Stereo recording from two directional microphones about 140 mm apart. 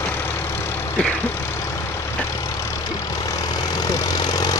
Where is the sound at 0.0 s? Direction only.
15° left (ahead or behind).